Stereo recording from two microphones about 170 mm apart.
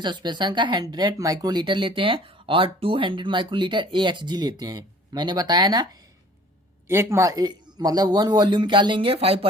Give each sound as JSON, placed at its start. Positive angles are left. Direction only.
{"t": 0.0, "sound": "speech", "side_deg": -25}